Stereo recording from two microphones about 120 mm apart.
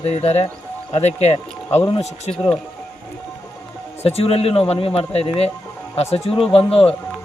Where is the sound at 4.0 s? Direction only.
55° left (ahead or behind).